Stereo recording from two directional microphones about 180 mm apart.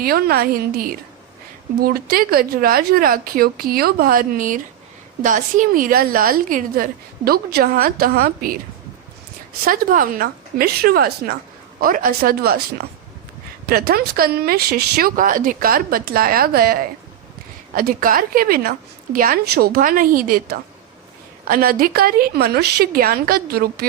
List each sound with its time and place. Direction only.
0.0 s speech: 55° right (ahead or behind)
9.6 s speech: 50° right (ahead or behind)
13.7 s speech: 60° right (ahead or behind)